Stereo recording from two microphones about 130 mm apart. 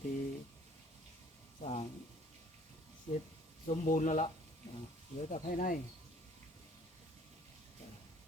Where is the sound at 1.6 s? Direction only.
50° left (ahead or behind).